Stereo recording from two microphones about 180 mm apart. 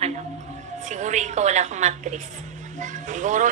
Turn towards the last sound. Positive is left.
turn(degrees=-45)  # may be behind; listen again after turning